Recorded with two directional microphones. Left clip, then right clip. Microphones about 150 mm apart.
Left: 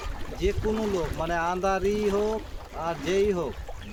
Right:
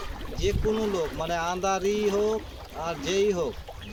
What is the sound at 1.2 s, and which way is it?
Speech, 20° left (ahead or behind).